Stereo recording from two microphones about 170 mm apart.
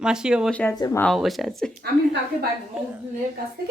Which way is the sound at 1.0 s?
Centre (ahead or behind).